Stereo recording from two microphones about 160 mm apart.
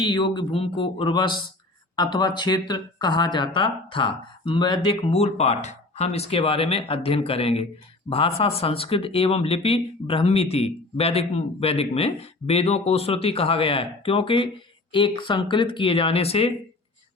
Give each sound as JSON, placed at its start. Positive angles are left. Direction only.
{"t": 0.0, "sound": "speech", "side_deg": 30}